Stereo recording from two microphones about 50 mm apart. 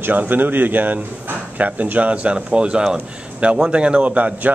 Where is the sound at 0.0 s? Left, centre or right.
Right.